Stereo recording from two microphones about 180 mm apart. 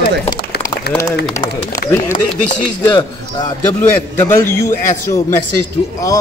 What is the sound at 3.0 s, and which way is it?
Speech, 25° left (ahead or behind).